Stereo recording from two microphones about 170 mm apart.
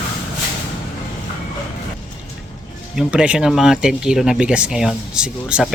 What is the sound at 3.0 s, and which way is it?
Speech, 5° right (ahead or behind).